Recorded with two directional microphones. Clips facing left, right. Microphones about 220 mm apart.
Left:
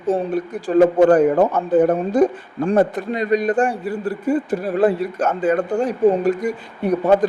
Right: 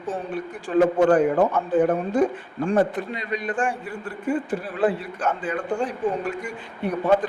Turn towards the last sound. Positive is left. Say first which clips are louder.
# left 5 dB
turn(degrees=40)  # may be behind; listen again after turning